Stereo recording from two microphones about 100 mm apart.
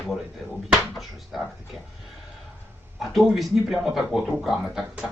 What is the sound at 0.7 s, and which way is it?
Speech, 5° right (ahead or behind).